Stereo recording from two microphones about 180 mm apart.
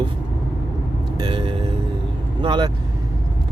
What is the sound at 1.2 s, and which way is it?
Speech, 25° right (ahead or behind).